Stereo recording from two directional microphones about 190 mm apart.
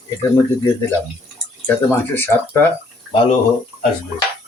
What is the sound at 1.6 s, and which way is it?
Speech, 10° left (ahead or behind).